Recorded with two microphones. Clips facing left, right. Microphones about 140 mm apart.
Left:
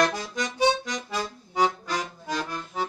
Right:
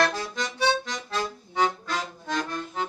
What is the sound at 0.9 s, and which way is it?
Accordion, 10° left (ahead or behind).